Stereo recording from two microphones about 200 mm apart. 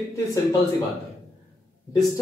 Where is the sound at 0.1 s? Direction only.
20° left (ahead or behind).